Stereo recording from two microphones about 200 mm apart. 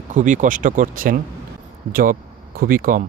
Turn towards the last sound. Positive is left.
turn(degrees=-45)  # may be behind; listen again after turning